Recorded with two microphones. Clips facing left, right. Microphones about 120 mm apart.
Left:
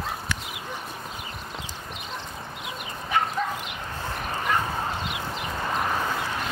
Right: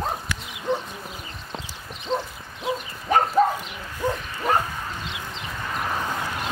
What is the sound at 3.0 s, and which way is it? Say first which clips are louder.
Dog: right 7 dB; 40° right (ahead or behind).